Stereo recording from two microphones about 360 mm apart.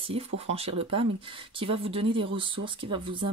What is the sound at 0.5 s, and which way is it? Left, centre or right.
Speech, centre.